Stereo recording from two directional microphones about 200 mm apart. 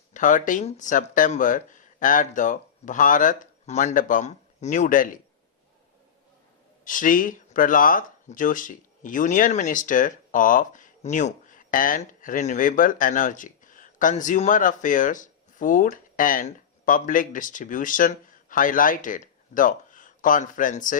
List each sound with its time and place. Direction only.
0.1 s speech: 40° left (ahead or behind)
6.8 s speech: 40° left (ahead or behind)